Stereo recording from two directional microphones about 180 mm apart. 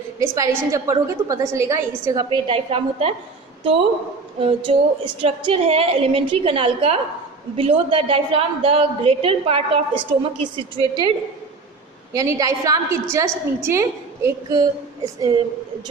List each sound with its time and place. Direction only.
0.2 s a woman's voice: 20° right (ahead or behind)
4.4 s a woman's voice: 30° right (ahead or behind)
12.1 s a woman's voice: 20° right (ahead or behind)